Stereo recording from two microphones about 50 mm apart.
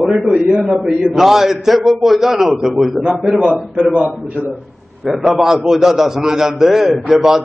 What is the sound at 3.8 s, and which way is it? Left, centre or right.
Speech, right.